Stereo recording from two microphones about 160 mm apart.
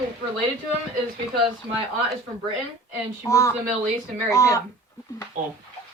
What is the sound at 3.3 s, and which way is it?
Speech, 20° left (ahead or behind).